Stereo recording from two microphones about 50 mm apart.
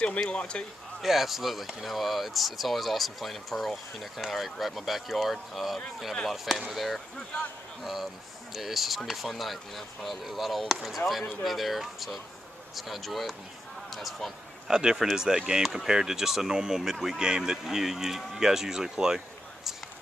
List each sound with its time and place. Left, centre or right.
0.3 s speech: left
1.0 s speech: centre
14.7 s speech: centre